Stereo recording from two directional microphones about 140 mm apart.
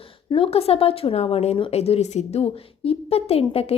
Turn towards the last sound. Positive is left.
turn(degrees=45)  # may be behind; listen again after turning